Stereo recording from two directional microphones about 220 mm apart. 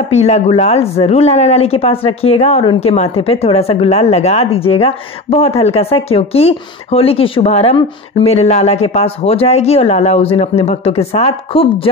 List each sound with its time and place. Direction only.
0.1 s speech: 30° left (ahead or behind)